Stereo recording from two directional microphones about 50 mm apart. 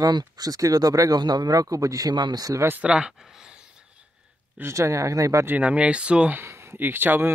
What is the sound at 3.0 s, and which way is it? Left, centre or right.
Speech, centre.